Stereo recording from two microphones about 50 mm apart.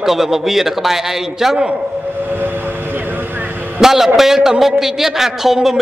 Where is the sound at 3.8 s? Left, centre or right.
Centre.